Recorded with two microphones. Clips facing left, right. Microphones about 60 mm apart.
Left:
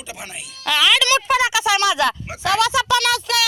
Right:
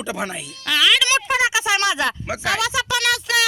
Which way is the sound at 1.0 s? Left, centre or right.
Centre.